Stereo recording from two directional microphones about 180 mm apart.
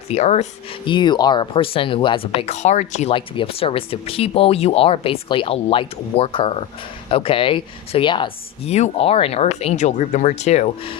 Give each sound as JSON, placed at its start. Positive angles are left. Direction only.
{"t": 0.1, "sound": "speech", "side_deg": 40}
{"t": 0.9, "sound": "speech", "side_deg": 25}